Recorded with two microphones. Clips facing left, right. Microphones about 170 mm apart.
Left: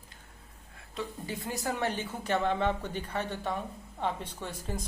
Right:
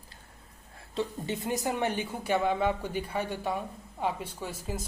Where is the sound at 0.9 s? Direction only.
25° right (ahead or behind).